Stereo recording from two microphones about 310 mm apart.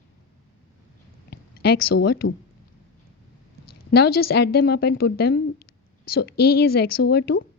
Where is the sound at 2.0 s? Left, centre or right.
Left.